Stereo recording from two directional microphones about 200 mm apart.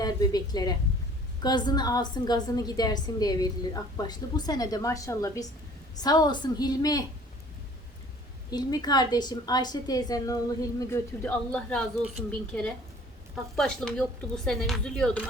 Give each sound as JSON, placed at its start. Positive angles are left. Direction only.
{"t": 0.0, "sound": "a woman's voice", "side_deg": 20}
{"t": 8.4, "sound": "a woman's voice", "side_deg": 20}